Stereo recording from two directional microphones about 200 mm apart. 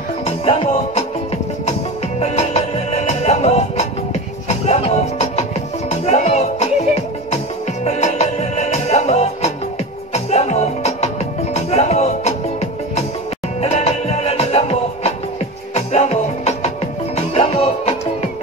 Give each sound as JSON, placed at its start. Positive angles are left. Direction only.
{"t": 0.2, "sound": "music", "side_deg": 30}
{"t": 7.8, "sound": "music", "side_deg": 35}
{"t": 13.6, "sound": "music", "side_deg": 35}